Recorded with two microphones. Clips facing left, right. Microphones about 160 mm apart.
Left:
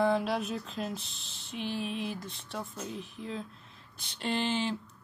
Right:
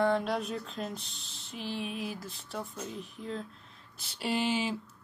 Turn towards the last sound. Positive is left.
turn(degrees=-10)  # may be behind; listen again after turning